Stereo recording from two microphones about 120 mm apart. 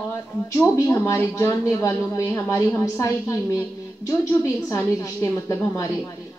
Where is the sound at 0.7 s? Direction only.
25° left (ahead or behind).